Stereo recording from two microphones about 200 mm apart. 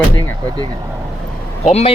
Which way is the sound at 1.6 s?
30° left (ahead or behind).